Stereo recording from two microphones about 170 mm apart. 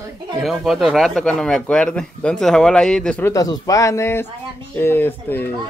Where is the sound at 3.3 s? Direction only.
20° left (ahead or behind).